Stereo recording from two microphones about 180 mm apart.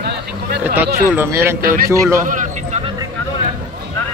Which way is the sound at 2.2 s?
45° right (ahead or behind).